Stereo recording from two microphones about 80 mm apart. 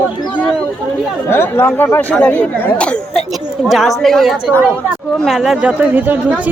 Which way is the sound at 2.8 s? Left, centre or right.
Centre.